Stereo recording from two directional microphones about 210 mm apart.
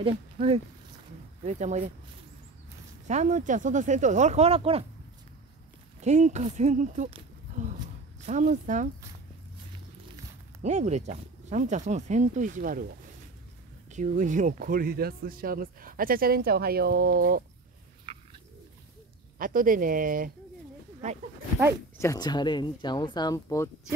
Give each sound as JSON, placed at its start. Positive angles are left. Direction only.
{"t": 0.0, "sound": "speech", "side_deg": -30}
{"t": 3.1, "sound": "speech", "side_deg": -35}
{"t": 5.9, "sound": "speech", "side_deg": -35}
{"t": 8.3, "sound": "speech", "side_deg": -35}
{"t": 10.6, "sound": "speech", "side_deg": -35}
{"t": 13.9, "sound": "a man's voice", "side_deg": -35}
{"t": 18.1, "sound": "bird", "side_deg": -20}
{"t": 19.3, "sound": "speech", "side_deg": -40}
{"t": 21.9, "sound": "speech", "side_deg": 15}